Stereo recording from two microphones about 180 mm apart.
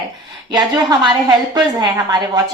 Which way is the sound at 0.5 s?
20° right (ahead or behind).